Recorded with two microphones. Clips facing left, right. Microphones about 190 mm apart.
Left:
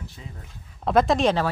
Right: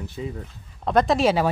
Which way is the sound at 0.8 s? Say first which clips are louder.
Even; centre (ahead or behind).